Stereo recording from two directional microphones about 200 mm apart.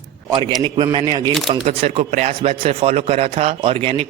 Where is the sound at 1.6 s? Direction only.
35° right (ahead or behind).